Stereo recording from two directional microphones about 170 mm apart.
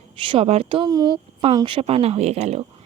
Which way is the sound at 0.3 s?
35° right (ahead or behind).